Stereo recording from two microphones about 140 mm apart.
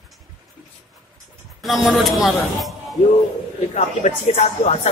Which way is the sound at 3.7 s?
50° left (ahead or behind).